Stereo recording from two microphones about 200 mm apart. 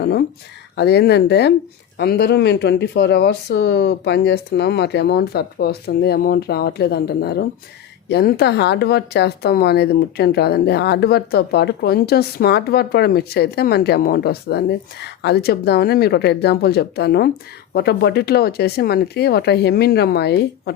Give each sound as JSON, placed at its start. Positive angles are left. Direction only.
{"t": 0.0, "sound": "speech", "side_deg": 50}